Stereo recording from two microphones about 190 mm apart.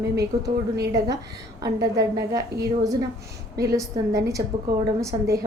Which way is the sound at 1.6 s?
20° right (ahead or behind).